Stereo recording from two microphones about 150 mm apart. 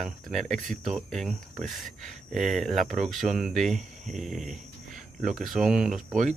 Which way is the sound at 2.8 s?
60° right (ahead or behind).